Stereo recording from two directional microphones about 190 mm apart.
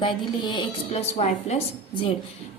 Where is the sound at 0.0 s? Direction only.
25° left (ahead or behind).